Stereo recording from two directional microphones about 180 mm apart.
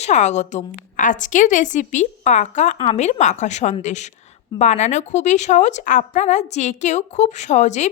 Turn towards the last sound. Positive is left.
turn(degrees=40)  # may be behind; listen again after turning